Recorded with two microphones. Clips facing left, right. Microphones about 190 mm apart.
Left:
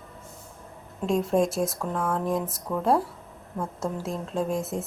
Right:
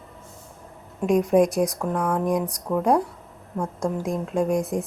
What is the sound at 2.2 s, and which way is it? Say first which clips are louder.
Speech: right 4 dB; 15° right (ahead or behind).